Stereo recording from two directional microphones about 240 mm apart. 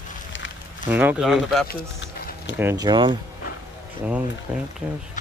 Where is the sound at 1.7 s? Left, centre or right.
Left.